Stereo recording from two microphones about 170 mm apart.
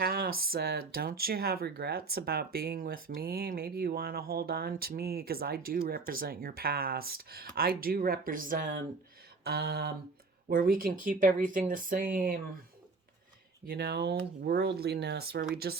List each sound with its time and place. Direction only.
0.0 s speech: 65° right (ahead or behind)
9.4 s speech: 70° right (ahead or behind)
10.5 s speech: 60° right (ahead or behind)
13.7 s speech: 70° right (ahead or behind)